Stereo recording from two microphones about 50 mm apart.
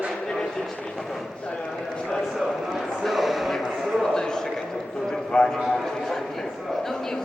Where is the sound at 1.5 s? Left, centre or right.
Left.